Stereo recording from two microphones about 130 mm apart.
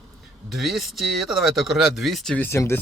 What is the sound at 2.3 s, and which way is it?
Speech, 20° left (ahead or behind).